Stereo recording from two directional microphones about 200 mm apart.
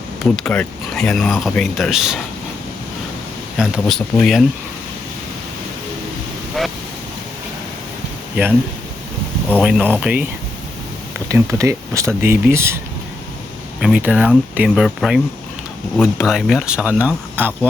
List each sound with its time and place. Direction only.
0.3 s speech: 5° left (ahead or behind)
3.6 s speech: centre (ahead or behind)
9.6 s speech: 5° right (ahead or behind)
11.3 s speech: 15° right (ahead or behind)
13.8 s speech: 5° right (ahead or behind)